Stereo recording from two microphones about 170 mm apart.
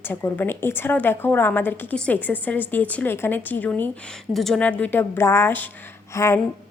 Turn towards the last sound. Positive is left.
turn(degrees=15)  # may be behind; listen again after turning